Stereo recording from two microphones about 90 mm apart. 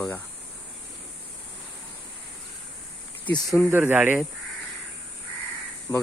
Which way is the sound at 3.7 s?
20° right (ahead or behind).